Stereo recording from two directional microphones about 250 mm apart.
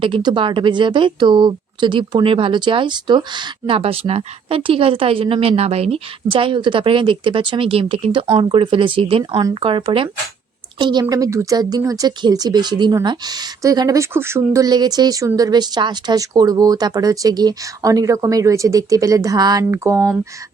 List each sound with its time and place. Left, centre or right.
0.0 s a woman's voice: centre